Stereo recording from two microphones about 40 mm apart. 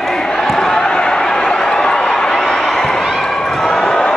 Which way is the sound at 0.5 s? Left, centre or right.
Centre.